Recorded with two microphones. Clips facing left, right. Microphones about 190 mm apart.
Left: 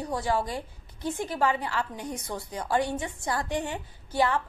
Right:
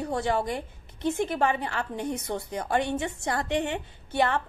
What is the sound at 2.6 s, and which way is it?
A woman's voice, 25° right (ahead or behind).